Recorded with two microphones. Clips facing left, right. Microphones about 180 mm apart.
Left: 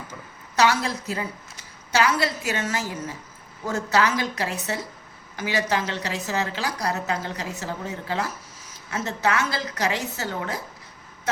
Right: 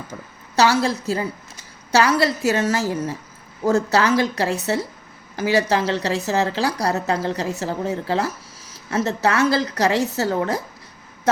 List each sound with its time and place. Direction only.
0.5 s a woman's voice: 30° right (ahead or behind)